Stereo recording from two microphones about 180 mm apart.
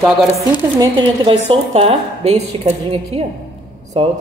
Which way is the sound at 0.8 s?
25° right (ahead or behind).